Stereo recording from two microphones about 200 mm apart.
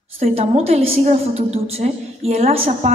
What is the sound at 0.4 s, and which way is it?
A woman's voice, 30° right (ahead or behind).